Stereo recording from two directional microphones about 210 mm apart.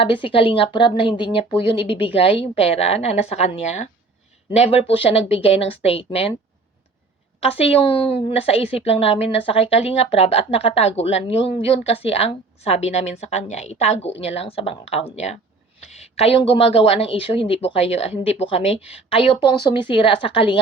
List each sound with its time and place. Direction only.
0.0 s a woman's voice: 25° left (ahead or behind)
7.4 s a woman's voice: 30° left (ahead or behind)